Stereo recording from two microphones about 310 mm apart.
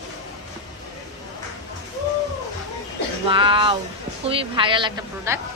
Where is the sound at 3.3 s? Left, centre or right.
Centre.